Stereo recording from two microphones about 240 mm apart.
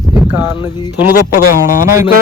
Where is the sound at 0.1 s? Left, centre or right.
Centre.